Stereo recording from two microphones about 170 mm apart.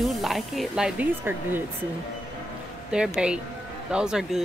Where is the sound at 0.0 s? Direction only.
Centre (ahead or behind).